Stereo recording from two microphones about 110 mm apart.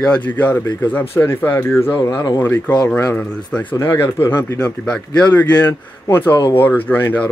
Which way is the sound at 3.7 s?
25° left (ahead or behind).